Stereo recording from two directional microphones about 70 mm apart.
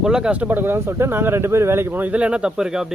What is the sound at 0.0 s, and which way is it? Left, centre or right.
Speech, centre.